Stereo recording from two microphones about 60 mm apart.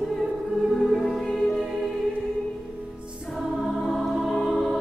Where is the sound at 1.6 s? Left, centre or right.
Centre.